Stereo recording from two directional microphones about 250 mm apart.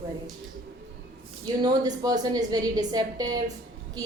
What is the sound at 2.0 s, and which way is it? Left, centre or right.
A woman's voice, centre.